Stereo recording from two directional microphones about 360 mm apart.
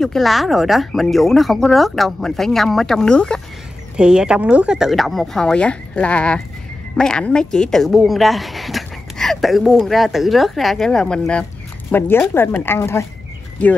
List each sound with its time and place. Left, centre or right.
0.0 s speech: centre